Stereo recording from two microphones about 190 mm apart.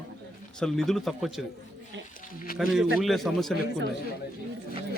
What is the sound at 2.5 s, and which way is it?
Speech, 50° left (ahead or behind).